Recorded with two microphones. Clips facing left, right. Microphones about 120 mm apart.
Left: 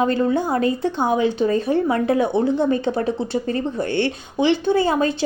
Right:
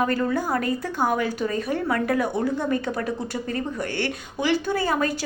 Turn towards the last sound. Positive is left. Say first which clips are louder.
# left 5 dB
turn(degrees=25)  # may be behind; listen again after turning